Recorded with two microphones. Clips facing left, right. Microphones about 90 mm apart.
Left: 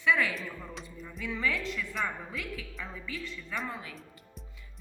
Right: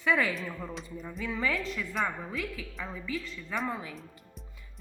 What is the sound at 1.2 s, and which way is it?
Speech, 35° right (ahead or behind).